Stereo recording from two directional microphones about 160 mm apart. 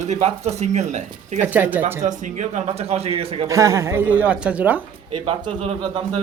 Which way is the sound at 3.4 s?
20° right (ahead or behind).